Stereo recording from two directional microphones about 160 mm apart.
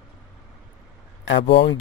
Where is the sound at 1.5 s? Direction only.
90° left.